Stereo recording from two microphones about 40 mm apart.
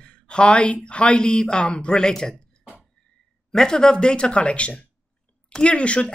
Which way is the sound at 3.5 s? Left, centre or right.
Centre.